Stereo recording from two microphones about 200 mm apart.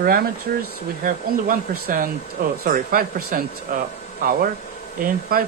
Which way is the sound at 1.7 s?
45° right (ahead or behind).